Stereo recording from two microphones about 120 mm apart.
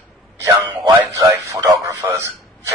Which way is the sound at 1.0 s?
25° right (ahead or behind).